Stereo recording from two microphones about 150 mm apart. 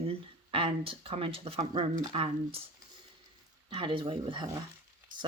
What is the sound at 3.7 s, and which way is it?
Speech, 35° right (ahead or behind).